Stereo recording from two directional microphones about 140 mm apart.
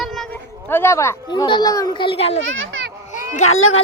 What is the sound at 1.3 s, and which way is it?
Speech, 35° left (ahead or behind).